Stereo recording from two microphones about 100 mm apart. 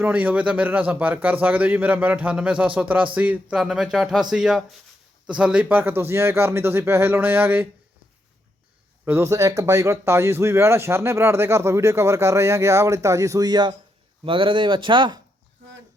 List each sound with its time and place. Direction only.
0.0 s a man's voice: 15° right (ahead or behind)
3.6 s speech: 5° right (ahead or behind); by 7.7 s 20° right (ahead or behind)
9.0 s speech: 20° right (ahead or behind)
9.3 s speech: 35° right (ahead or behind)
14.3 s speech: 60° right (ahead or behind)